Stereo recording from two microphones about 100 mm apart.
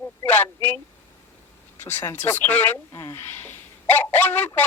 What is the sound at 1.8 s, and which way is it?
Speech, 25° left (ahead or behind).